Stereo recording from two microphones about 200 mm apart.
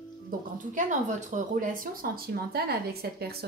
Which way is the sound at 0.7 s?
40° right (ahead or behind).